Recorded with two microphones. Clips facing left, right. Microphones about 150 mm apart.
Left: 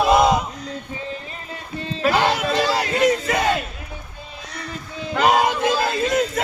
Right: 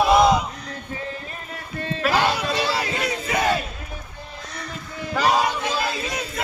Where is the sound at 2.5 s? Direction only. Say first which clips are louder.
Left 4 dB; 40° left (ahead or behind).